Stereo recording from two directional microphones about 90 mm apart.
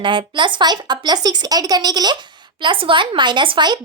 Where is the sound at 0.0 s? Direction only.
60° right (ahead or behind).